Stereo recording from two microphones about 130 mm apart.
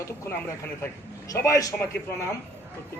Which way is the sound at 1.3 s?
25° left (ahead or behind).